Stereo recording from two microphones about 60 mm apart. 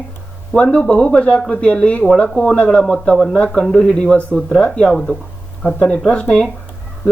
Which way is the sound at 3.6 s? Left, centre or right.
Centre.